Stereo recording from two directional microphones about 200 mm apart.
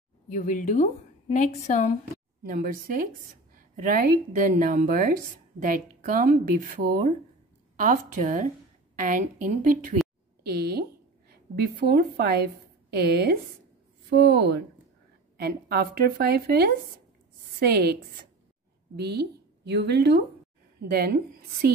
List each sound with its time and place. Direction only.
0.3 s a woman's voice: 40° left (ahead or behind)
2.4 s a woman's voice: 45° right (ahead or behind)
7.8 s a woman's voice: 40° right (ahead or behind)
10.4 s a woman's voice: 50° right (ahead or behind)
18.9 s a woman's voice: 55° right (ahead or behind)